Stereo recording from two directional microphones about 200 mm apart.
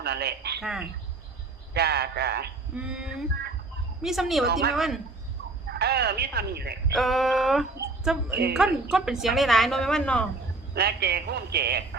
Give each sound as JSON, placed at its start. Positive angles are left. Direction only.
{"t": 0.0, "sound": "speech", "side_deg": -55}
{"t": 0.6, "sound": "a woman's voice", "side_deg": 0}
{"t": 1.7, "sound": "speech", "side_deg": -55}
{"t": 2.7, "sound": "a woman's voice", "side_deg": -5}
{"t": 5.6, "sound": "speech", "side_deg": -55}
{"t": 6.9, "sound": "a woman's voice", "side_deg": 0}
{"t": 10.8, "sound": "speech", "side_deg": -55}